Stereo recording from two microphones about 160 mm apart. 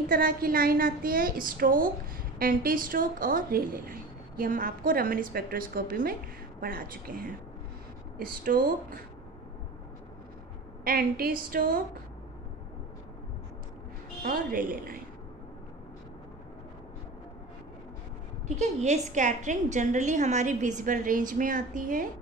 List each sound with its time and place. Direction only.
0.1 s a woman's voice: 65° right (ahead or behind)
10.8 s a woman's voice: 65° right (ahead or behind)
14.2 s a woman's voice: 65° right (ahead or behind)
18.6 s a woman's voice: 45° right (ahead or behind)